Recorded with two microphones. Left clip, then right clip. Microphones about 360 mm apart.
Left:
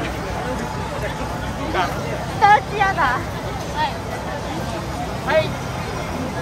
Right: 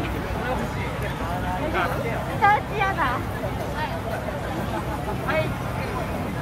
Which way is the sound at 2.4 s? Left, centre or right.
Left.